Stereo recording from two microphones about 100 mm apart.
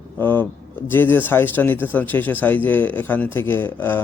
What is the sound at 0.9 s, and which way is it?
A man's voice, 20° left (ahead or behind).